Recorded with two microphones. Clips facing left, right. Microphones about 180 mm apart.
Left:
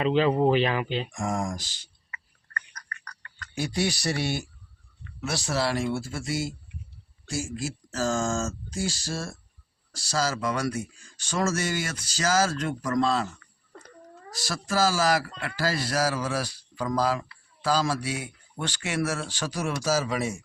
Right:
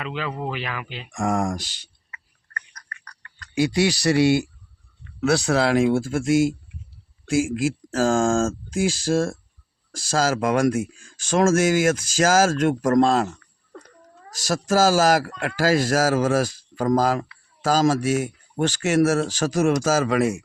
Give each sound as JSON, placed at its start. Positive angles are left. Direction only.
{"t": 0.0, "sound": "speech", "side_deg": 30}
{"t": 1.1, "sound": "speech", "side_deg": -75}
{"t": 3.5, "sound": "speech", "side_deg": -90}
{"t": 5.2, "sound": "speech", "side_deg": -65}
{"t": 7.3, "sound": "speech", "side_deg": -90}
{"t": 8.0, "sound": "speech", "side_deg": -50}
{"t": 8.7, "sound": "speech", "side_deg": -90}
{"t": 9.0, "sound": "speech", "side_deg": -50}
{"t": 10.4, "sound": "speech", "side_deg": -50}
{"t": 11.0, "sound": "speech", "side_deg": -90}
{"t": 11.3, "sound": "speech", "side_deg": -50}
{"t": 14.4, "sound": "speech", "side_deg": -45}